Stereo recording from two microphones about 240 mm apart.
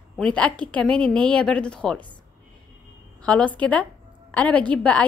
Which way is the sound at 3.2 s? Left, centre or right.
Centre.